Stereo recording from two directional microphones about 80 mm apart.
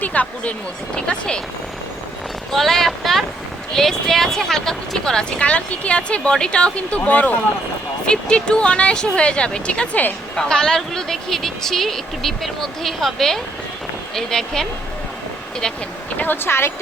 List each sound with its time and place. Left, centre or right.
0.0 s speech: centre
2.5 s speech: centre
10.3 s speech: centre
16.1 s speech: left